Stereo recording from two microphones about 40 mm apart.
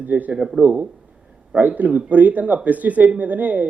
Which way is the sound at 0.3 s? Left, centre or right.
Right.